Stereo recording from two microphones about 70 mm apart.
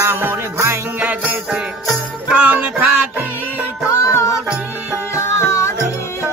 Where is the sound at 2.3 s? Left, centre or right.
Centre.